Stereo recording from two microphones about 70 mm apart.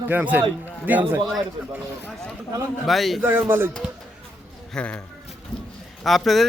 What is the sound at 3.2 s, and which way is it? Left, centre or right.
Speech, right.